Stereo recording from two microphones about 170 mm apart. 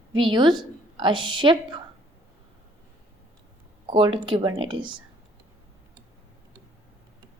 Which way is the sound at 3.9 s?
30° right (ahead or behind).